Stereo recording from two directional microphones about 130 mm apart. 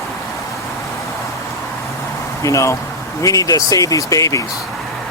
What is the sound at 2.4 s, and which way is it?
Speech, 25° left (ahead or behind).